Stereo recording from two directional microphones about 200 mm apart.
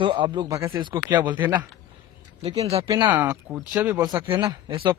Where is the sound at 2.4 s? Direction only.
30° right (ahead or behind).